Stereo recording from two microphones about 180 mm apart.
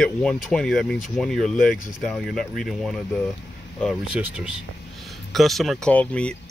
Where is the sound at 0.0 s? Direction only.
5° left (ahead or behind).